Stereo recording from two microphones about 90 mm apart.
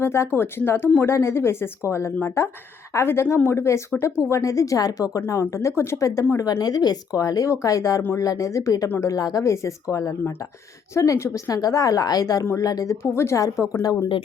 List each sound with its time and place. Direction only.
0.0 s a woman's voice: 30° left (ahead or behind)
6.4 s speech: 45° left (ahead or behind)